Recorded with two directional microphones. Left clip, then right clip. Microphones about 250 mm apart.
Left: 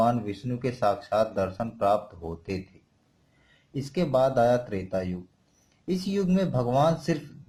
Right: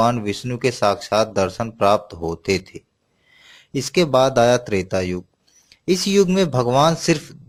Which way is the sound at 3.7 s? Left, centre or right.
Right.